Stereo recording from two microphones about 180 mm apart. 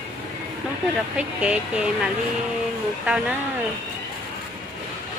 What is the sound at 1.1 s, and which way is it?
Speech, 5° right (ahead or behind).